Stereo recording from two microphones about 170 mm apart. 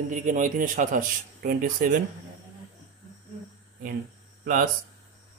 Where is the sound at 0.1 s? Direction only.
50° right (ahead or behind).